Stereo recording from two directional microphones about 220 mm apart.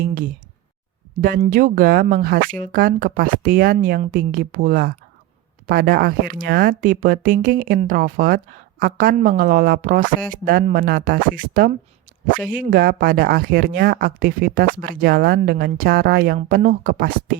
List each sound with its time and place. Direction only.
0.0 s speech: 40° right (ahead or behind)
1.5 s speech: 40° right (ahead or behind)